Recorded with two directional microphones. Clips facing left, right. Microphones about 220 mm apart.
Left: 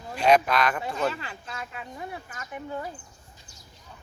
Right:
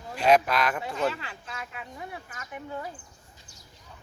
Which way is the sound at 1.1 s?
40° left (ahead or behind).